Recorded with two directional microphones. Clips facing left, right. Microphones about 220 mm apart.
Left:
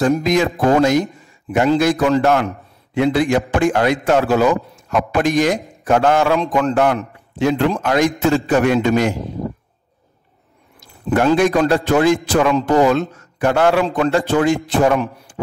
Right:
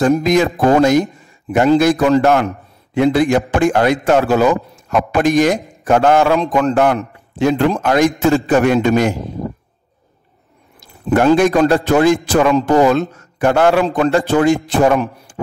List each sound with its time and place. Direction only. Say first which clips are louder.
0.0 s a man's voice: right 3 dB; 50° right (ahead or behind)
11.1 s a man's voice: right 3 dB; 45° right (ahead or behind)